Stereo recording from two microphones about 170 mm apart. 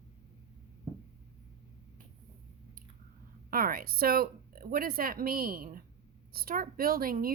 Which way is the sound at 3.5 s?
60° right (ahead or behind).